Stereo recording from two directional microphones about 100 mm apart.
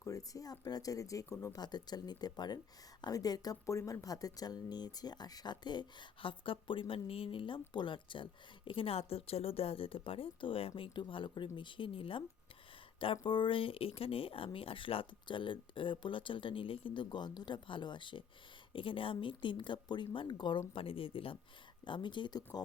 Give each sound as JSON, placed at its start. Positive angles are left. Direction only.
{"t": 0.0, "sound": "speech", "side_deg": 35}
{"t": 1.6, "sound": "a woman's voice", "side_deg": 45}
{"t": 13.2, "sound": "speech", "side_deg": 55}
{"t": 21.8, "sound": "a woman's voice", "side_deg": 55}